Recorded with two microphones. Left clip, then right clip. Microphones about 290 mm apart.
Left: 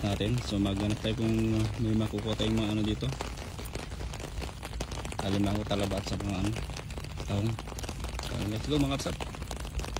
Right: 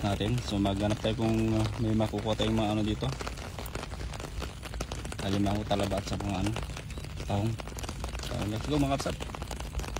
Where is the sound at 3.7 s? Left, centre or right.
Centre.